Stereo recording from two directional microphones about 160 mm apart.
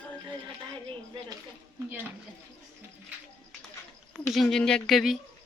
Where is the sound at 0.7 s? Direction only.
30° right (ahead or behind).